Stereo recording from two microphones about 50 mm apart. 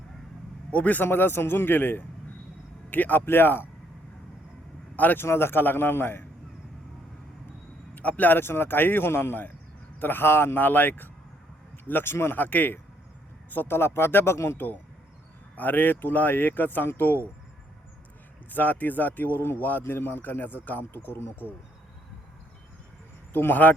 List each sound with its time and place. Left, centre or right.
0.7 s speech: left
1.0 s speech: left
4.9 s speech: left
5.2 s speech: left
7.9 s speech: left
12.1 s speech: left
12.4 s speech: left
14.3 s speech: left
15.5 s speech: left
18.5 s speech: left
23.3 s speech: left